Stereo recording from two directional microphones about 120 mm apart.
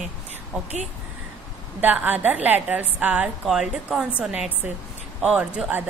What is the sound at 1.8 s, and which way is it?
A woman's voice, 15° right (ahead or behind).